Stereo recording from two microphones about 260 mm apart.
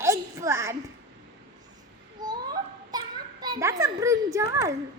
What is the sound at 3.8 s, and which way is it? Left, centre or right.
Speech, centre.